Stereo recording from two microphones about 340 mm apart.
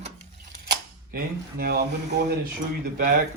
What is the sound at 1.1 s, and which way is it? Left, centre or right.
Speech, right.